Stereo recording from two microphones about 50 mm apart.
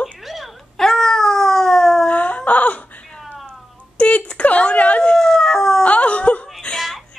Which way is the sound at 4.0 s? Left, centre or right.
Left.